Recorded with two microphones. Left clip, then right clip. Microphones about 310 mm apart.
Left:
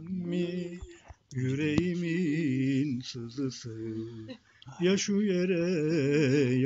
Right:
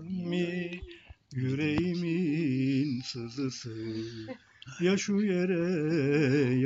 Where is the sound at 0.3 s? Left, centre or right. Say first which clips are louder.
Right 1 dB; centre.